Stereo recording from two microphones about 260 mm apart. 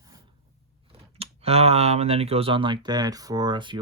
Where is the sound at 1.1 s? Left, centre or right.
Right.